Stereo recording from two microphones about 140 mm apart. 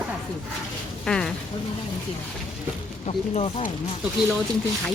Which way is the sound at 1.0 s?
5° left (ahead or behind).